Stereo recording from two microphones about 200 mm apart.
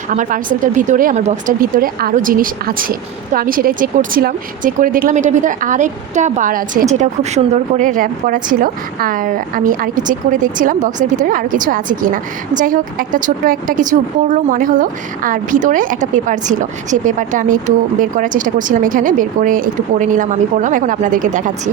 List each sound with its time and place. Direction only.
0.1 s speech: 40° right (ahead or behind)